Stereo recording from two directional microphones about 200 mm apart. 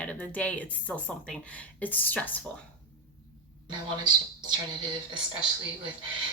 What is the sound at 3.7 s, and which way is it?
Speech, 20° right (ahead or behind).